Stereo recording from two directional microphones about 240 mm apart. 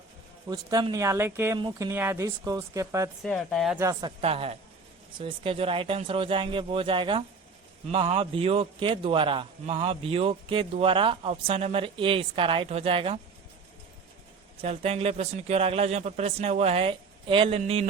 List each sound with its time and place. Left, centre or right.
0.4 s speech: centre
3.2 s speech: centre
4.2 s a man's voice: right
14.6 s a man's voice: right